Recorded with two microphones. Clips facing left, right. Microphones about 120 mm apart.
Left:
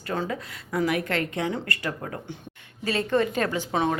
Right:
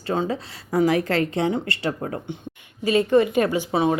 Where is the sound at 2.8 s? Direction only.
15° right (ahead or behind).